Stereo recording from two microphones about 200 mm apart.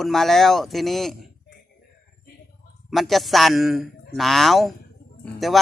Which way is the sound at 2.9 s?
Centre (ahead or behind).